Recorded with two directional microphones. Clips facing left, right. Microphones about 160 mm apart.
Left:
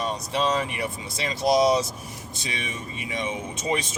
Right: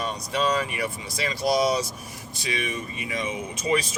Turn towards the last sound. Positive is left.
turn(degrees=25)  # may be behind; listen again after turning